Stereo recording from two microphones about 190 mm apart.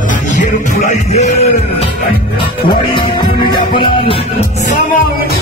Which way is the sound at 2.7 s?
25° left (ahead or behind).